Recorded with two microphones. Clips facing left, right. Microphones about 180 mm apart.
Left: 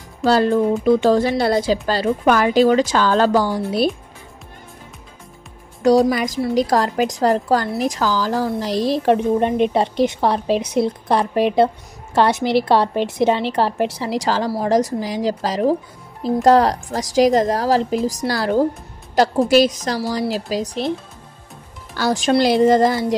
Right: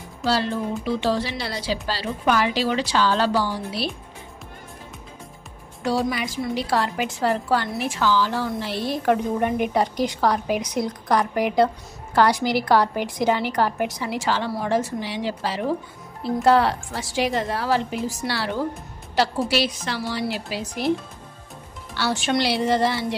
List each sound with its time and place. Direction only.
0.2 s a woman's voice: 50° left (ahead or behind)
5.8 s a woman's voice: 40° left (ahead or behind)
9.0 s a woman's voice: 25° left (ahead or behind)
21.9 s a woman's voice: 40° left (ahead or behind)